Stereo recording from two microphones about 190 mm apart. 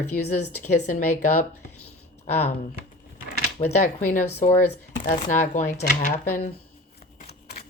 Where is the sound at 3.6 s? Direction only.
25° left (ahead or behind).